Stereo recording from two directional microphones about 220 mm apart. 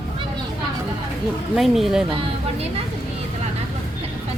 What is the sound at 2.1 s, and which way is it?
Speech, 25° right (ahead or behind).